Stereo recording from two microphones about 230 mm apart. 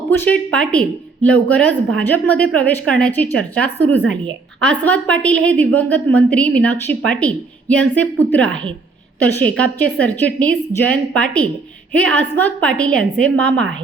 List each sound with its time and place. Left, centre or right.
0.2 s a woman's voice: centre
4.0 s a woman's voice: right
4.6 s a woman's voice: centre
10.7 s a woman's voice: centre
11.1 s a woman's voice: centre